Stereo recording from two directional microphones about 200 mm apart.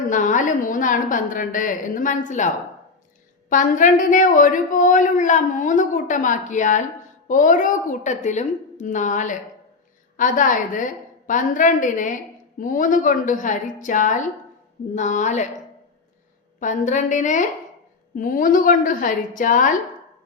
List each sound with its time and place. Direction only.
0.1 s speech: 40° left (ahead or behind)
3.5 s speech: 40° left (ahead or behind)
16.6 s a woman's voice: 40° left (ahead or behind)